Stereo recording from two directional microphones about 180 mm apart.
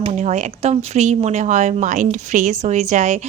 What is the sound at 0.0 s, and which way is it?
A woman's voice, 40° right (ahead or behind).